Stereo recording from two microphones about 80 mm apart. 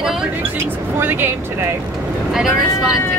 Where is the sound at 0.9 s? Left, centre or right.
Right.